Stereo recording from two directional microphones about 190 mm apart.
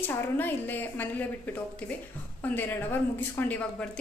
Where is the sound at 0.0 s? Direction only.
10° left (ahead or behind).